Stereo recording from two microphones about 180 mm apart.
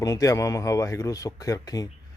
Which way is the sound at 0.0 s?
20° left (ahead or behind).